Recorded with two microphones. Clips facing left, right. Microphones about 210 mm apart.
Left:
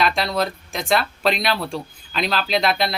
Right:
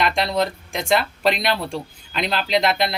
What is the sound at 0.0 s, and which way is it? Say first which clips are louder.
Speech: right 1 dB; 20° right (ahead or behind).